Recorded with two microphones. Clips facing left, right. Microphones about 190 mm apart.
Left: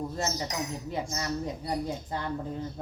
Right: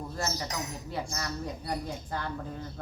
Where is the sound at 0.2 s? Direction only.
20° left (ahead or behind).